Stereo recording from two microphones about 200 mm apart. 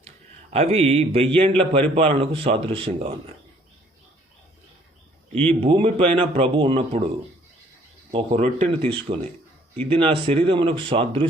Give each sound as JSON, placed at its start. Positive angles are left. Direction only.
{"t": 0.5, "sound": "a man's voice", "side_deg": -30}
{"t": 5.4, "sound": "a man's voice", "side_deg": -25}
{"t": 8.1, "sound": "a man's voice", "side_deg": -30}